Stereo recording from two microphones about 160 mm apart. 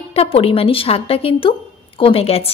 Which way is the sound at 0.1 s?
40° left (ahead or behind).